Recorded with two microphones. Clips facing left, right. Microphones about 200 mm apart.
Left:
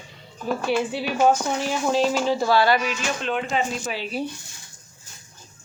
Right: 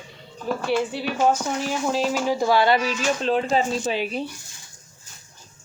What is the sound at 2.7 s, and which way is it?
Speech, 35° right (ahead or behind).